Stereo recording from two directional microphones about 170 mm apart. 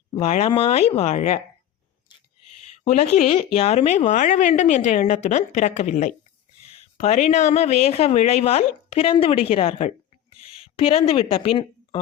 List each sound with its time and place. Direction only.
0.2 s speech: 35° left (ahead or behind)
2.6 s a woman's voice: 40° left (ahead or behind)